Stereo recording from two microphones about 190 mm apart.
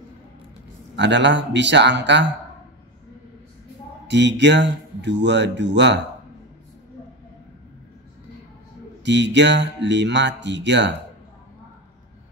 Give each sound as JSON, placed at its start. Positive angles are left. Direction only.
{"t": 0.9, "sound": "speech", "side_deg": -70}
{"t": 4.1, "sound": "speech", "side_deg": -65}
{"t": 9.0, "sound": "speech", "side_deg": -70}